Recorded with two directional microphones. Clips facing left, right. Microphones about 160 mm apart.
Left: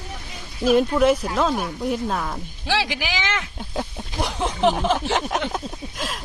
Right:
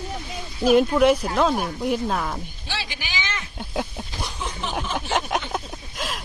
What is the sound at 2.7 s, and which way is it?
Speech, 90° left.